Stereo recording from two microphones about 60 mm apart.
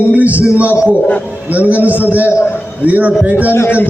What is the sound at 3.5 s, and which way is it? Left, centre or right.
Speech, left.